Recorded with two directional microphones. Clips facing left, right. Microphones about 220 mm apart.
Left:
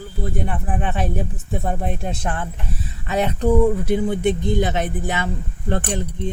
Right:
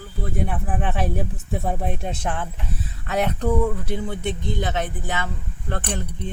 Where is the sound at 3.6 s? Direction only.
15° left (ahead or behind).